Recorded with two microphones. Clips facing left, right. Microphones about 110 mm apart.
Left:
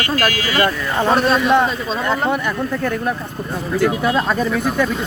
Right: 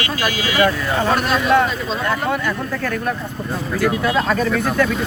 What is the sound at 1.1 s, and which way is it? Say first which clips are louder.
Speech: left 2 dB; 25° left (ahead or behind).